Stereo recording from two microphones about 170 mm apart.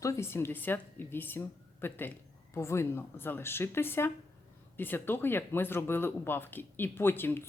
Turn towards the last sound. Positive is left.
turn(degrees=10)  # may be behind; listen again after turning